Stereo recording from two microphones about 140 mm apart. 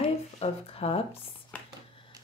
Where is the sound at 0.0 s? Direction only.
45° left (ahead or behind).